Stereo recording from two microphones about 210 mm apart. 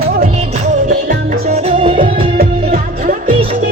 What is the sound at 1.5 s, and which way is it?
Music, 25° right (ahead or behind).